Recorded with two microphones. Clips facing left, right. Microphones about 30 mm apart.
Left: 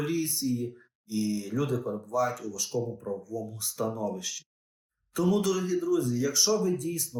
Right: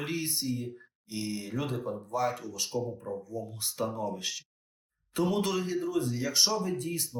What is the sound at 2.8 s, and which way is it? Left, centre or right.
Speech, right.